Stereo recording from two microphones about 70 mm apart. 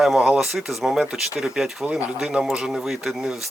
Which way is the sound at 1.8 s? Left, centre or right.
Centre.